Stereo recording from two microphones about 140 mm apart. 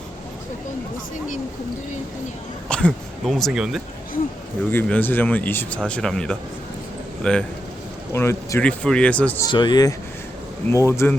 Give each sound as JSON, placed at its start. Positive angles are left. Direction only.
{"t": 2.6, "sound": "speech", "side_deg": 5}
{"t": 4.7, "sound": "speech", "side_deg": 15}
{"t": 8.1, "sound": "speech", "side_deg": 20}
{"t": 8.6, "sound": "speech", "side_deg": 10}
{"t": 9.4, "sound": "speech", "side_deg": 35}
{"t": 10.7, "sound": "speech", "side_deg": 20}